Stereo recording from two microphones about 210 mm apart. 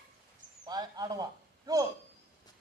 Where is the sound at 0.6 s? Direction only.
20° right (ahead or behind).